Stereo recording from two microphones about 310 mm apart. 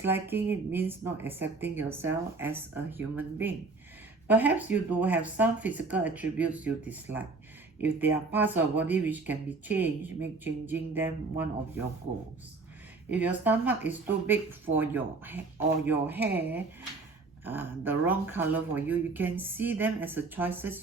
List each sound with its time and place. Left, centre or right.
0.0 s speech: centre
13.1 s speech: centre